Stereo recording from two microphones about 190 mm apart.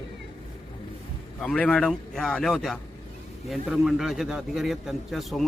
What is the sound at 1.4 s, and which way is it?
A man's voice, 5° left (ahead or behind).